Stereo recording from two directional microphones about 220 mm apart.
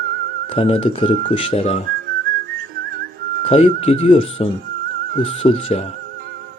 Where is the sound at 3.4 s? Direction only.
30° left (ahead or behind).